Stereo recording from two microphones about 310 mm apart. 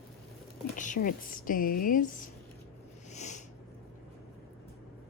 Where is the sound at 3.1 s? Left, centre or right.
Left.